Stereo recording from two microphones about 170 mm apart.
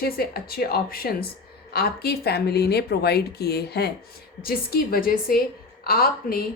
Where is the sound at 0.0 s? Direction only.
65° left (ahead or behind).